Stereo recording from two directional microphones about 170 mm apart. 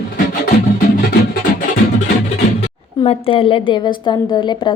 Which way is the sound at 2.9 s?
35° left (ahead or behind).